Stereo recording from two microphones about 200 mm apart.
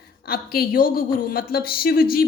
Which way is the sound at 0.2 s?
50° left (ahead or behind).